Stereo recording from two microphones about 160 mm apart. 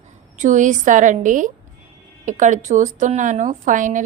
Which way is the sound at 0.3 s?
50° right (ahead or behind).